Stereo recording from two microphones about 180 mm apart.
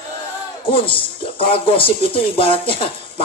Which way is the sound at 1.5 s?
30° left (ahead or behind).